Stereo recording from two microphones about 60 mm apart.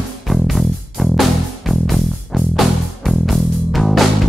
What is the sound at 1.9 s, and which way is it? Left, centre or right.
Music, centre.